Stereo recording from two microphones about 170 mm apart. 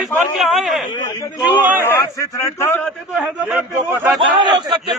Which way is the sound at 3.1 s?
5° right (ahead or behind).